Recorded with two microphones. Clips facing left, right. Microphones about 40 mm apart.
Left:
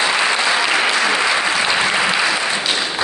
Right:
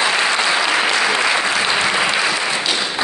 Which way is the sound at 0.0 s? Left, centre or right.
Centre.